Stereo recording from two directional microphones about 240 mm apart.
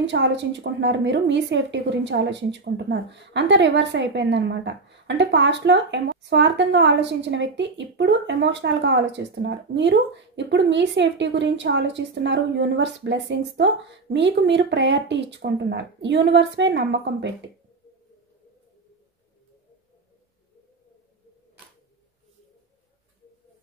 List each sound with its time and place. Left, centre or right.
0.0 s a woman's voice: right